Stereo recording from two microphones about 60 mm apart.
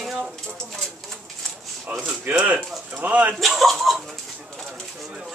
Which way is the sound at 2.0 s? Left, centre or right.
Right.